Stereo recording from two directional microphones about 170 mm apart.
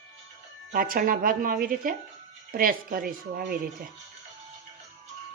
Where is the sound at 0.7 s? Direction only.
55° right (ahead or behind).